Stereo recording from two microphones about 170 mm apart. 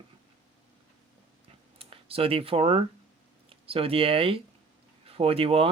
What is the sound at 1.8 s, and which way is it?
Speech, 35° right (ahead or behind).